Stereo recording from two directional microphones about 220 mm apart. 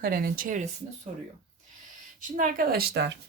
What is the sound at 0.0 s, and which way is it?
Speech, 45° right (ahead or behind).